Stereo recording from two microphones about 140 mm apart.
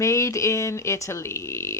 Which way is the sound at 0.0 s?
20° left (ahead or behind).